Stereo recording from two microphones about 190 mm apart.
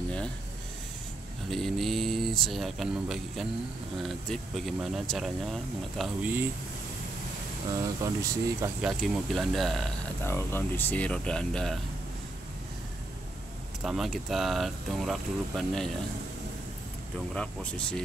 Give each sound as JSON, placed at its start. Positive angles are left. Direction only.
{"t": 1.5, "sound": "speech", "side_deg": 0}
{"t": 7.7, "sound": "speech", "side_deg": -15}
{"t": 8.8, "sound": "speech", "side_deg": 0}
{"t": 10.2, "sound": "speech", "side_deg": 10}
{"t": 13.8, "sound": "speech", "side_deg": 0}
{"t": 17.3, "sound": "speech", "side_deg": 5}